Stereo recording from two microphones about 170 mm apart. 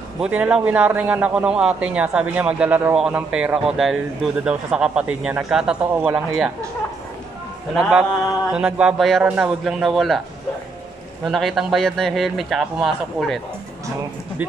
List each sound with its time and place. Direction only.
0.2 s a man's voice: 5° right (ahead or behind)
8.5 s a man's voice: 5° right (ahead or behind)
11.3 s a man's voice: centre (ahead or behind)